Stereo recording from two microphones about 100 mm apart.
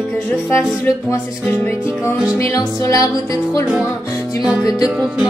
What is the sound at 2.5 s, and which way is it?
Music, 35° left (ahead or behind).